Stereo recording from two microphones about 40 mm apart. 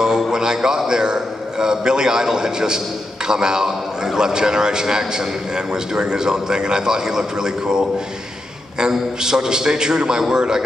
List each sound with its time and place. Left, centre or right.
0.0 s a man's voice: centre